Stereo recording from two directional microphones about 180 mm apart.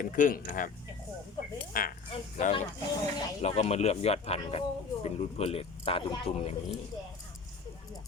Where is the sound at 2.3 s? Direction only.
40° left (ahead or behind).